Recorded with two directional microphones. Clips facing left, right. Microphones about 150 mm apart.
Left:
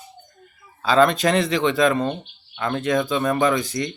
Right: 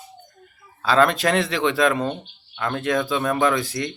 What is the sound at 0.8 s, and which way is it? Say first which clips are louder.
Speech: left 1 dB; centre (ahead or behind).